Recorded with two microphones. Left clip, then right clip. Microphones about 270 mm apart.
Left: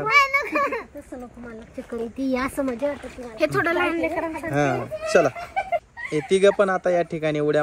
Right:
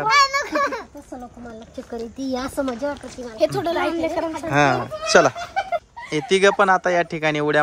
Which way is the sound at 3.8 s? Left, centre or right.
Right.